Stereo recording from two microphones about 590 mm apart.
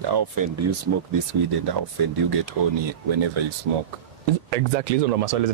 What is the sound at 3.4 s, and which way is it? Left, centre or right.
Speech, right.